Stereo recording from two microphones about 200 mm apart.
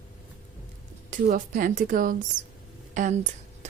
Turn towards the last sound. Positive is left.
turn(degrees=-35)  # may be behind; listen again after turning